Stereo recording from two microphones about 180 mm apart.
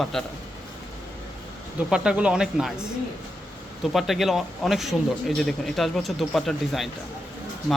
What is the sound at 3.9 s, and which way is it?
Speech, centre (ahead or behind).